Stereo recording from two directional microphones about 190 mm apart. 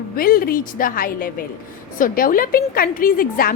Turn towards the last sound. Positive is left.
turn(degrees=50)  # may be behind; listen again after turning